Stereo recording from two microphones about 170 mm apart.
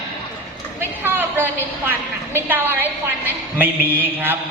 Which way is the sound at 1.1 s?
10° right (ahead or behind).